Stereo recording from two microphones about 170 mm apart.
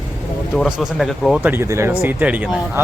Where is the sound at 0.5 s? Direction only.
Centre (ahead or behind).